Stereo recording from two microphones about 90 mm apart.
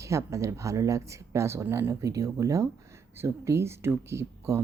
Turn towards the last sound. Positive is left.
turn(degrees=-35)  # may be behind; listen again after turning